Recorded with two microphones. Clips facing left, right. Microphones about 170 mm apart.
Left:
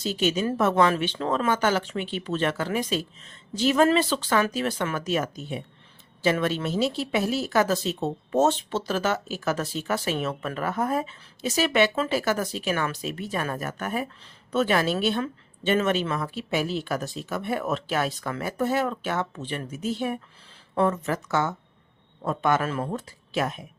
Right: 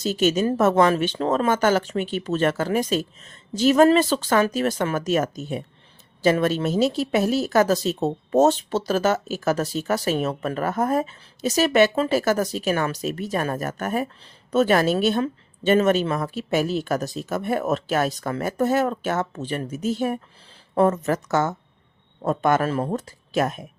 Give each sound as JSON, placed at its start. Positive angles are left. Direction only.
{"t": 0.0, "sound": "speech", "side_deg": -45}